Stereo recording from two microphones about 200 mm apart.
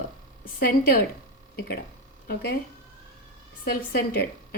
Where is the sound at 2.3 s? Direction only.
50° left (ahead or behind).